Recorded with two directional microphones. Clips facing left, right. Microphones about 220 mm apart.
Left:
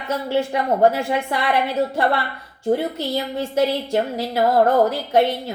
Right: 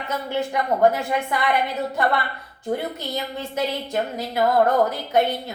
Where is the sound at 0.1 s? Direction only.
30° left (ahead or behind).